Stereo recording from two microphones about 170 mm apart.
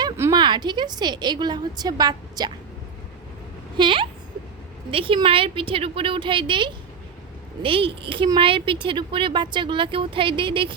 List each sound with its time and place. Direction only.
0.0 s speech: 20° right (ahead or behind)
3.8 s a woman's voice: 30° right (ahead or behind)